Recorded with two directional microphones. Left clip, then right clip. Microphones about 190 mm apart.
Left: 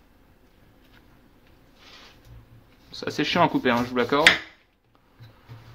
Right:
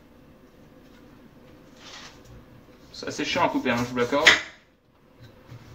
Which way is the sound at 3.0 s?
55° left (ahead or behind).